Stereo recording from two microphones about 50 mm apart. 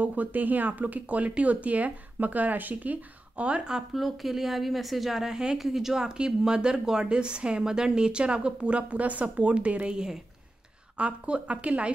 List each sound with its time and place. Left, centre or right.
0.0 s speech: right; by 3.8 s centre
3.9 s a woman's voice: centre; by 9.9 s right
11.0 s speech: right